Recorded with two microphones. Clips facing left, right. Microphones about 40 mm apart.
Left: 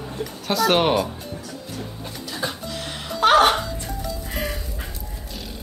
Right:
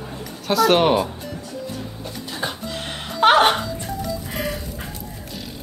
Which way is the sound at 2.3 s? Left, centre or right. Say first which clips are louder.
Right 1 dB; right.